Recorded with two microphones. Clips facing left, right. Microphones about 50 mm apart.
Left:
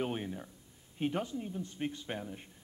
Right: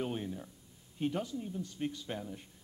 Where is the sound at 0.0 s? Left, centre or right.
Left.